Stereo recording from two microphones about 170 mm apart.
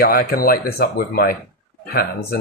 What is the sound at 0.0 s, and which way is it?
Speech, 60° left (ahead or behind).